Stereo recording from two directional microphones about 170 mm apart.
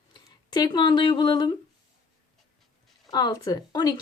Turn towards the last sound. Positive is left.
turn(degrees=25)  # may be behind; listen again after turning